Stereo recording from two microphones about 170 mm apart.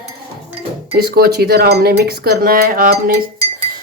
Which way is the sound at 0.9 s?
65° right (ahead or behind).